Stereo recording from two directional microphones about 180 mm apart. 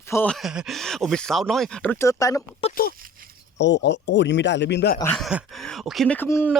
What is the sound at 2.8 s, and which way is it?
Speech, 50° left (ahead or behind).